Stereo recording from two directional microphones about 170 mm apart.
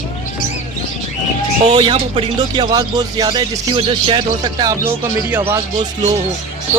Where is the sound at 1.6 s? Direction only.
30° right (ahead or behind).